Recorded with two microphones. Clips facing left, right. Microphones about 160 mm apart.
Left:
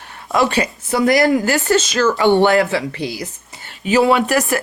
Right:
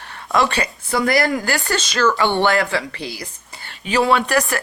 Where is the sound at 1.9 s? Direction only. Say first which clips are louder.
Left 2 dB; 25° left (ahead or behind).